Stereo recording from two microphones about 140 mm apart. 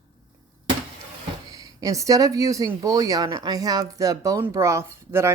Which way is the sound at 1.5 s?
25° right (ahead or behind).